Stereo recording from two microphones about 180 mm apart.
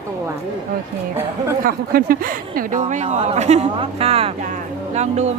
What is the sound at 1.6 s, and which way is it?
Speech, 55° right (ahead or behind).